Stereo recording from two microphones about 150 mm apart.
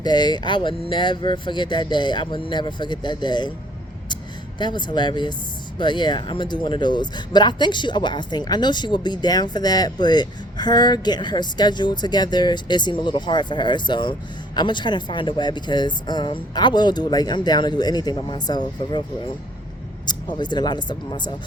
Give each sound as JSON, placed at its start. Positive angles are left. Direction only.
{"t": 0.0, "sound": "speech", "side_deg": 30}